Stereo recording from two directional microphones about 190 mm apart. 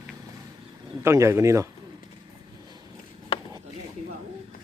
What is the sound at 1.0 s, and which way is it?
Speech, 15° right (ahead or behind).